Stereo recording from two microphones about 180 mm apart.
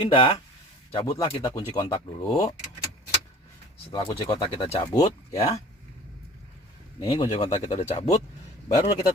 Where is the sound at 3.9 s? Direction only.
25° left (ahead or behind).